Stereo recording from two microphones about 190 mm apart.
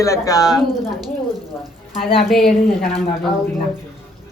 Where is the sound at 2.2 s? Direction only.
Centre (ahead or behind).